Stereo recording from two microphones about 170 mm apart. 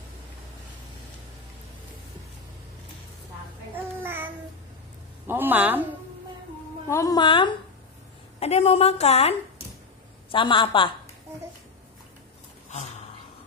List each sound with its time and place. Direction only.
3.7 s child singing: 10° right (ahead or behind)
5.2 s a sound: 10° right (ahead or behind)
6.9 s a woman's voice: 20° left (ahead or behind); by 9.3 s 40° left (ahead or behind)
10.3 s a woman's voice: 30° left (ahead or behind)